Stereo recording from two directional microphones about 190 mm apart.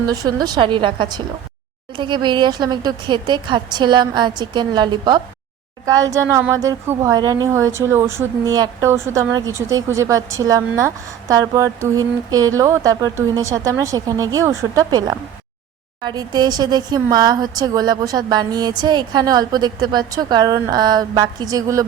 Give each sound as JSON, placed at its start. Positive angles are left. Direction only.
{"t": 0.0, "sound": "speech", "side_deg": -20}